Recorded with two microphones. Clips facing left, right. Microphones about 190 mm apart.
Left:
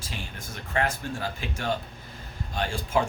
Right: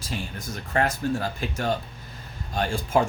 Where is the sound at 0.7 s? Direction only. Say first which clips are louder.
Right 4 dB; 40° right (ahead or behind).